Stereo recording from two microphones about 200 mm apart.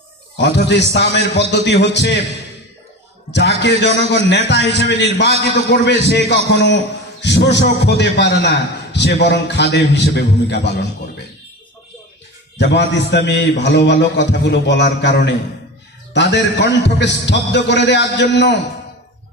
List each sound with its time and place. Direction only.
0.4 s a man's voice: 60° left (ahead or behind)
3.3 s a man's voice: 55° left (ahead or behind)
12.5 s a man's voice: 60° left (ahead or behind)